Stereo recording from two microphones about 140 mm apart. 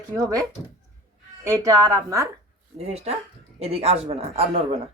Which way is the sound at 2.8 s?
50° right (ahead or behind).